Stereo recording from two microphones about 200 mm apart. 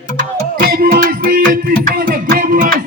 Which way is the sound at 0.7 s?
50° right (ahead or behind).